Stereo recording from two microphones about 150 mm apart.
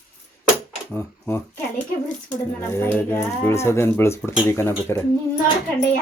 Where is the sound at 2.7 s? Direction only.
15° left (ahead or behind).